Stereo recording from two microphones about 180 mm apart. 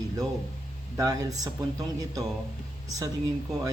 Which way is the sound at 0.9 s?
20° right (ahead or behind).